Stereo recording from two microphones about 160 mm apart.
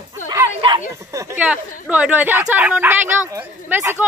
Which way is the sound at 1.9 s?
10° right (ahead or behind).